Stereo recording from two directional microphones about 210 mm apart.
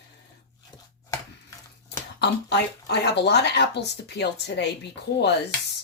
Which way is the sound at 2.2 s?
55° left (ahead or behind).